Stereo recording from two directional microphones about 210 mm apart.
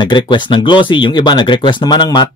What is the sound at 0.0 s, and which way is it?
Speech, 20° left (ahead or behind).